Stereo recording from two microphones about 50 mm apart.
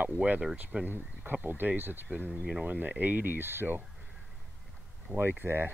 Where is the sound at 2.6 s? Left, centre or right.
Right.